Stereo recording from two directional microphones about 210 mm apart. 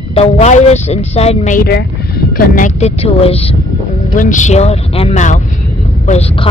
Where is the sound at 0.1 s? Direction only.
30° left (ahead or behind).